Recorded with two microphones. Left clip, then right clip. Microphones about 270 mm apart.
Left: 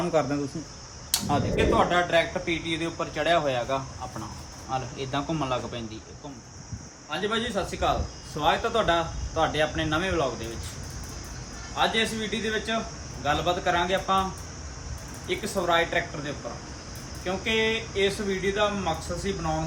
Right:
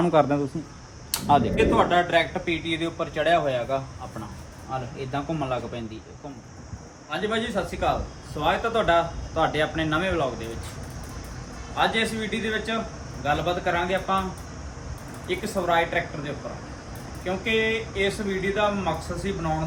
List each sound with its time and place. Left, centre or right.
0.1 s speech: centre
1.5 s speech: centre
7.1 s speech: centre
11.7 s speech: centre
15.3 s speech: centre